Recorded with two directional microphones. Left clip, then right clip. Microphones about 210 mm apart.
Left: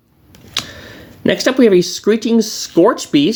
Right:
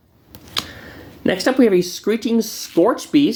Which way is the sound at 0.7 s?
35° left (ahead or behind).